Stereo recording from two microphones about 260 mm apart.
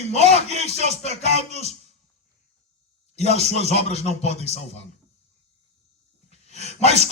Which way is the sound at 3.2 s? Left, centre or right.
Left.